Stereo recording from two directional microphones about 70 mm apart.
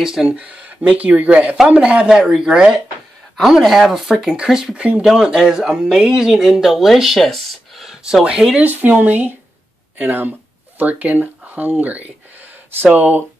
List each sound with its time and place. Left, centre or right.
0.0 s speech: centre
0.4 s speech: centre
4.7 s speech: centre
8.6 s speech: right